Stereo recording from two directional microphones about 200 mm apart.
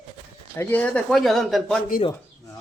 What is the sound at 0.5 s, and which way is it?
Speech, 10° left (ahead or behind).